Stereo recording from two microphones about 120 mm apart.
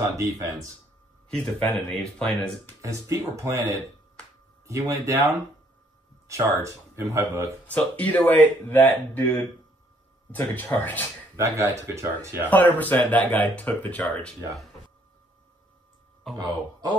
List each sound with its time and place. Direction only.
0.2 s speech: 25° right (ahead or behind)
1.3 s speech: 5° left (ahead or behind)
2.8 s speech: 25° right (ahead or behind)
7.6 s speech: 10° left (ahead or behind)
10.3 s speech: 15° left (ahead or behind)
11.3 s speech: 25° right (ahead or behind)
12.4 s speech: 15° left (ahead or behind)
16.3 s speech: 35° right (ahead or behind)